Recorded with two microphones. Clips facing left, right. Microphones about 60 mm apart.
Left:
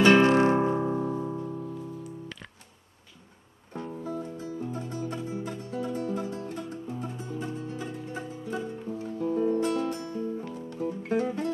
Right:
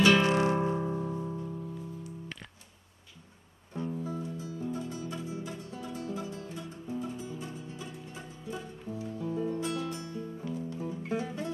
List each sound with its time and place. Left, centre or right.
0.0 s music: left
3.8 s music: left